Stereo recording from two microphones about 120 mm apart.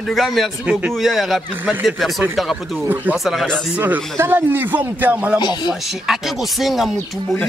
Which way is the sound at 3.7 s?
15° right (ahead or behind).